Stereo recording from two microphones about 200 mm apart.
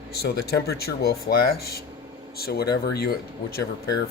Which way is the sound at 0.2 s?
55° left (ahead or behind).